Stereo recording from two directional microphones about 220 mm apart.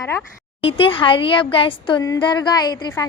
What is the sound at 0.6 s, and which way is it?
A woman's voice, 25° left (ahead or behind).